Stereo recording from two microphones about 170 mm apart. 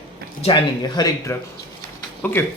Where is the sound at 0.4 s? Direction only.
25° left (ahead or behind).